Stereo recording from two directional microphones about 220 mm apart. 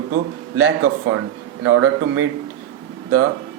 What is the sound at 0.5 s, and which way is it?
Speech, 90° right.